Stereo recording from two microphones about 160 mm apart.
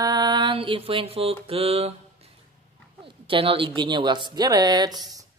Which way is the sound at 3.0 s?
35° right (ahead or behind).